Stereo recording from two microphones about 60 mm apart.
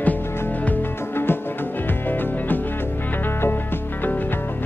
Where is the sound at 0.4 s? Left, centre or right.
Left.